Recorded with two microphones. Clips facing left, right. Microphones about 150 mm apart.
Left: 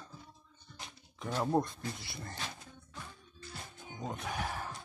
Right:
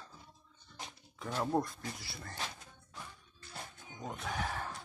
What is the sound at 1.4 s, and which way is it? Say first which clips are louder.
Speech: left 2 dB; 20° left (ahead or behind).